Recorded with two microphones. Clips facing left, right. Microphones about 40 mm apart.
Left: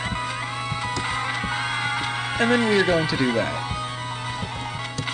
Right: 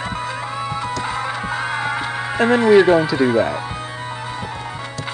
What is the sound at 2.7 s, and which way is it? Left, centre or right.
Speech, centre.